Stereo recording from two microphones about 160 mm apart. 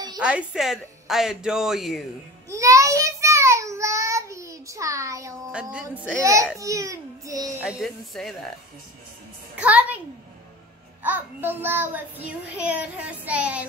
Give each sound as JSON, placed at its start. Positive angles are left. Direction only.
{"t": 0.2, "sound": "a woman's voice", "side_deg": -5}
{"t": 2.5, "sound": "child singing", "side_deg": -20}
{"t": 5.5, "sound": "child singing", "side_deg": -5}
{"t": 6.6, "sound": "a child's voice", "side_deg": -20}
{"t": 7.6, "sound": "a woman's voice", "side_deg": 0}
{"t": 9.6, "sound": "child singing", "side_deg": -10}
{"t": 11.0, "sound": "child singing", "side_deg": -10}